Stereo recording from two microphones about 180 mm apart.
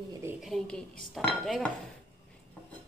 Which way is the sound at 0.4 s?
Centre (ahead or behind).